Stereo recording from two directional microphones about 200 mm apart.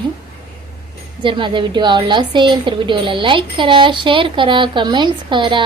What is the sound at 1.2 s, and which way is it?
A woman's voice, 25° right (ahead or behind).